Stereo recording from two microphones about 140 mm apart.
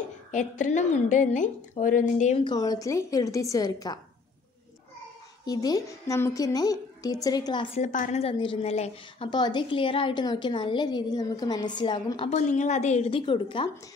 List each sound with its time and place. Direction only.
0.3 s a woman's voice: 60° left (ahead or behind)
2.3 s a woman's voice: 35° left (ahead or behind)
5.4 s a woman's voice: 25° left (ahead or behind)
7.7 s a woman's voice: 60° left (ahead or behind)
8.2 s a woman's voice: 40° left (ahead or behind)
9.3 s a woman's voice: 30° left (ahead or behind)
12.3 s a woman's voice: 60° left (ahead or behind); by 13.7 s 35° left (ahead or behind)